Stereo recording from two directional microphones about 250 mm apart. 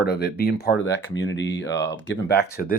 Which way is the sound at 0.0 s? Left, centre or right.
Left.